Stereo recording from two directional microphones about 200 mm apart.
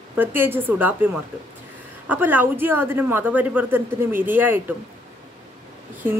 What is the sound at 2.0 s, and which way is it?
Speech, 10° right (ahead or behind).